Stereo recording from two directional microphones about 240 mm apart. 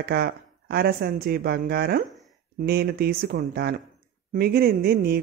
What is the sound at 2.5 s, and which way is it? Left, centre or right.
Speech, right.